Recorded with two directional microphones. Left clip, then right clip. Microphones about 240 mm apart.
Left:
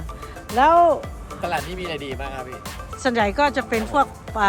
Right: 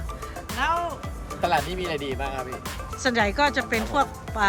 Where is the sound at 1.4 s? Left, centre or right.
Centre.